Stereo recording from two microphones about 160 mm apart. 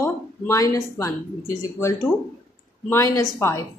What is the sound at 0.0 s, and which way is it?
Speech, 20° left (ahead or behind).